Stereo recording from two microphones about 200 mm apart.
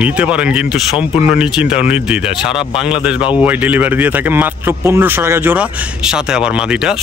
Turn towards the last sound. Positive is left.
turn(degrees=-5)  # may be behind; listen again after turning